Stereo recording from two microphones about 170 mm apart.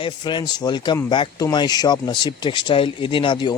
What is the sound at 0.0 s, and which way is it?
Speech, 25° left (ahead or behind).